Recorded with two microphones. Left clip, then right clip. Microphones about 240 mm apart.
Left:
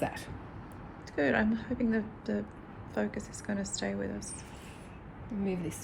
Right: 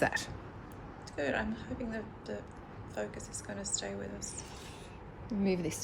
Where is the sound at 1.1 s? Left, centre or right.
Left.